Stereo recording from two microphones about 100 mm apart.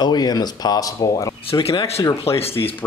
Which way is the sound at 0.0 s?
45° left (ahead or behind).